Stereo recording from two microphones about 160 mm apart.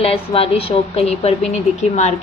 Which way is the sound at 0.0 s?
35° left (ahead or behind).